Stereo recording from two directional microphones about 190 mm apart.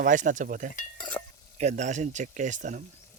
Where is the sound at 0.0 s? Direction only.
40° right (ahead or behind).